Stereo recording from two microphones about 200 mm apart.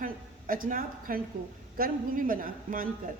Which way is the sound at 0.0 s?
45° right (ahead or behind).